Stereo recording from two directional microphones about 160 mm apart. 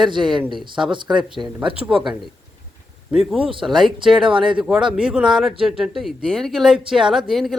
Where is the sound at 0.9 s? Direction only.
30° right (ahead or behind).